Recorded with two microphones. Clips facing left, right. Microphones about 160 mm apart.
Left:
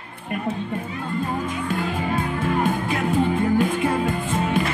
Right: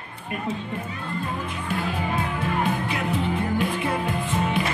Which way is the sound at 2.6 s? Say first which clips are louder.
Left 3 dB; 45° left (ahead or behind).